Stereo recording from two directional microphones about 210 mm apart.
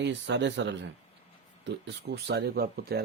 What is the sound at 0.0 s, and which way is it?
Speech, 55° right (ahead or behind).